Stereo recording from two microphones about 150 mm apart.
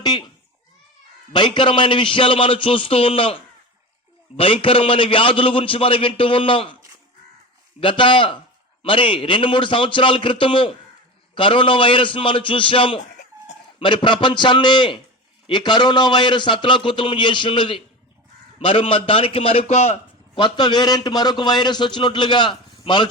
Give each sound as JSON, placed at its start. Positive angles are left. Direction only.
{"t": 0.0, "sound": "a child's voice", "side_deg": 30}
{"t": 1.3, "sound": "a man's voice", "side_deg": 30}
{"t": 7.8, "sound": "a man's voice", "side_deg": 35}
{"t": 20.4, "sound": "a man's voice", "side_deg": 30}